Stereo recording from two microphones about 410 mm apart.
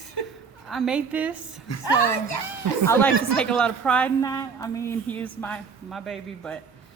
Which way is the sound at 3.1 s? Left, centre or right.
Left.